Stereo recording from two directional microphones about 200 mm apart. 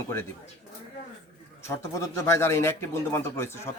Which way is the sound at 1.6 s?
15° left (ahead or behind).